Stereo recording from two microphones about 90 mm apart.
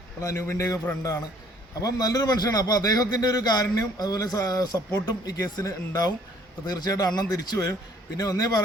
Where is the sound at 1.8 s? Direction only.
45° left (ahead or behind).